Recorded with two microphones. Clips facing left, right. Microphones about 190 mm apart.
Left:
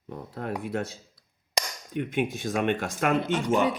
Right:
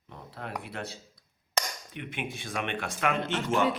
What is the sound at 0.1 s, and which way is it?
Speech, 45° left (ahead or behind).